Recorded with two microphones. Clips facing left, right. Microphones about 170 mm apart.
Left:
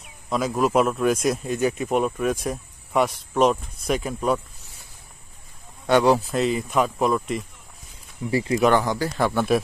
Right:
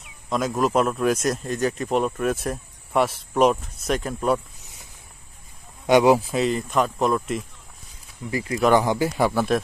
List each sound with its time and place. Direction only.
0.3 s speech: centre (ahead or behind)
5.9 s speech: 15° right (ahead or behind)
8.3 s speech: 30° left (ahead or behind)
8.7 s a man's voice: 15° right (ahead or behind)
9.3 s speech: 5° right (ahead or behind)